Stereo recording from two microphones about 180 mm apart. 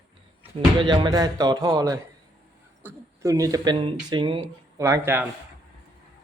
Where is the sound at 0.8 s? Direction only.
25° right (ahead or behind).